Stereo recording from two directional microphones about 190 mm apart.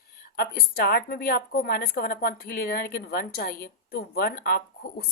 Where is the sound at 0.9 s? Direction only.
55° left (ahead or behind).